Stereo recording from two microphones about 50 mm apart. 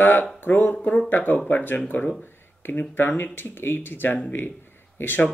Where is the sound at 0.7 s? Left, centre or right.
Centre.